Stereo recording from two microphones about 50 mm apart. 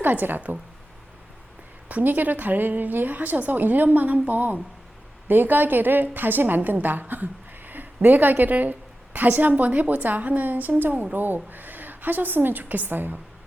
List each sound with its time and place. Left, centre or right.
0.0 s a woman's voice: right
1.9 s a woman's voice: right